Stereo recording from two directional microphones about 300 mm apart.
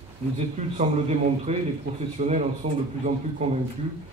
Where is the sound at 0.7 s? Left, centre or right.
Right.